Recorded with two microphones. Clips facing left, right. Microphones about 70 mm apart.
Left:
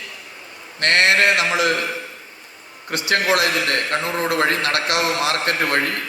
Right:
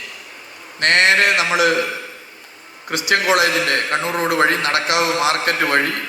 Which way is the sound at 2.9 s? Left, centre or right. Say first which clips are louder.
Right 2 dB; centre.